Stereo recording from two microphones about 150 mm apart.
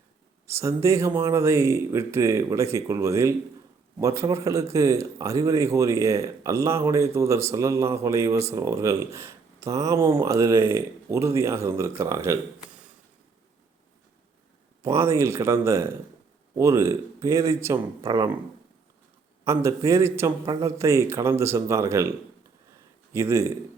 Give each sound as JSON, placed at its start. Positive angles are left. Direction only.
{"t": 0.4, "sound": "speech", "side_deg": -20}
{"t": 14.8, "sound": "speech", "side_deg": -20}
{"t": 19.5, "sound": "speech", "side_deg": -20}
{"t": 23.1, "sound": "speech", "side_deg": -20}